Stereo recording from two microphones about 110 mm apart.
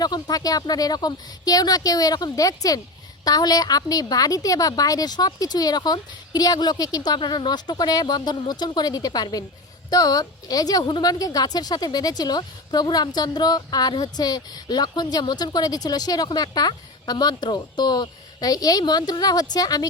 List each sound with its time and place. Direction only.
0.0 s a woman's voice: 35° left (ahead or behind)